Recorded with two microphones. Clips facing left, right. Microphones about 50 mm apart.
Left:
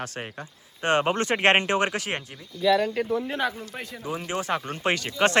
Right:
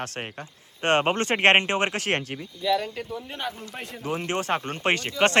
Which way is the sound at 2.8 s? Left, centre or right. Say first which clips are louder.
Left 7 dB; left.